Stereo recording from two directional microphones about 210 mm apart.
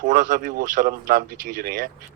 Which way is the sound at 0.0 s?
40° right (ahead or behind).